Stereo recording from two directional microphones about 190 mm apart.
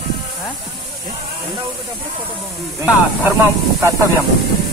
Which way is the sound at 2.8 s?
10° right (ahead or behind).